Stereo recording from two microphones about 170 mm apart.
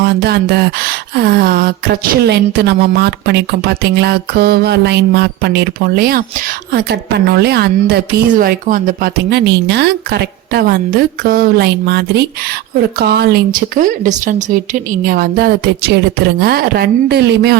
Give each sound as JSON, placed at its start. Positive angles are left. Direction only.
{"t": 0.0, "sound": "speech", "side_deg": -70}
{"t": 6.7, "sound": "a woman's voice", "side_deg": -75}